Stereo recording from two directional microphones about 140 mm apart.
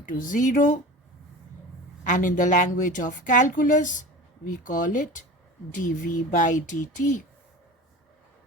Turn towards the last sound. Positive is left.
turn(degrees=65)  # may be behind; listen again after turning